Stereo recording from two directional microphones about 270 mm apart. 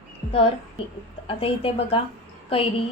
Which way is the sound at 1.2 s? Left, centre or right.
Left.